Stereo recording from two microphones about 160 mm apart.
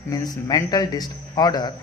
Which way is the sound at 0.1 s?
20° left (ahead or behind).